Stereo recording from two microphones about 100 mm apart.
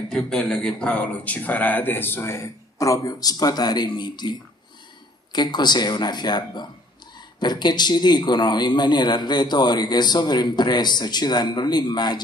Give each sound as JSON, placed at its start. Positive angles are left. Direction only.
{"t": 0.1, "sound": "a man's voice", "side_deg": 5}